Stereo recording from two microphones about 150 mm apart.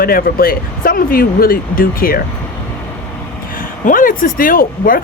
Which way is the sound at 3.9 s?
65° left (ahead or behind).